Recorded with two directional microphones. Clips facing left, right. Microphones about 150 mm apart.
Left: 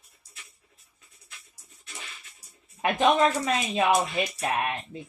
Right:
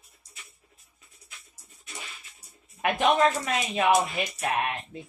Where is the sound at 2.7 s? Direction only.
25° left (ahead or behind).